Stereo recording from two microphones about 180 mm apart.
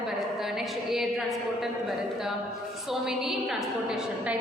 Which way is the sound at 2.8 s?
Centre (ahead or behind).